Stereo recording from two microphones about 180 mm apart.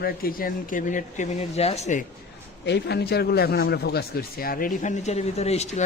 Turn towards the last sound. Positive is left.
turn(degrees=40)  # may be behind; listen again after turning